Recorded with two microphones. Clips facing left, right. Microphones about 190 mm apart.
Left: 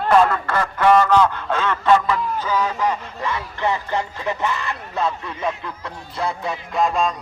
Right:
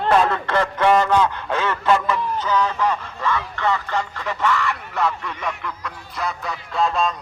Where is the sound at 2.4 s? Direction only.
10° left (ahead or behind).